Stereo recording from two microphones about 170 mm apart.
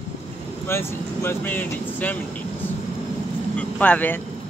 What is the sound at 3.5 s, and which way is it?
Speech, 10° left (ahead or behind).